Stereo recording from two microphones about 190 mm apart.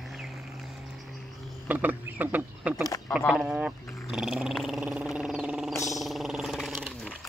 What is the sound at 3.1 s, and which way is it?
Dog, centre (ahead or behind).